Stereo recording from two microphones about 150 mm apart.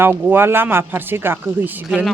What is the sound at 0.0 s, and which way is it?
Speech, 10° right (ahead or behind).